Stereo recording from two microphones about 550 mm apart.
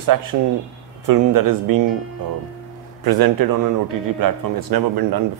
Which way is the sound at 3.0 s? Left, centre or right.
Right.